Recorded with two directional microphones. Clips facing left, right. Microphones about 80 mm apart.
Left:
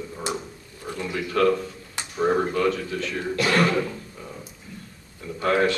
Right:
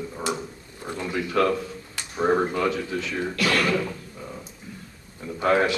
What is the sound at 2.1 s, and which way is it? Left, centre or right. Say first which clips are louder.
Speech: even; centre.